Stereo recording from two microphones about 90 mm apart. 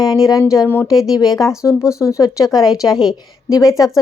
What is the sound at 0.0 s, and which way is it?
Speech, 45° left (ahead or behind).